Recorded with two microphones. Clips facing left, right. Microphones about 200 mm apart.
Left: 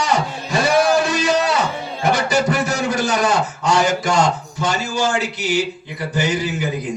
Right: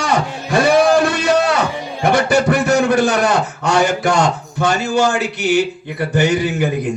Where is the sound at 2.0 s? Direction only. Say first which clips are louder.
Right 4 dB; 60° right (ahead or behind).